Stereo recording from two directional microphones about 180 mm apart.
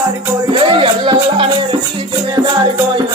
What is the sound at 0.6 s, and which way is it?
Music, 30° right (ahead or behind).